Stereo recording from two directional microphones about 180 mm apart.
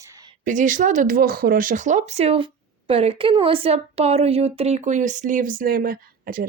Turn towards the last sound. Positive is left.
turn(degrees=-55)  # may be behind; listen again after turning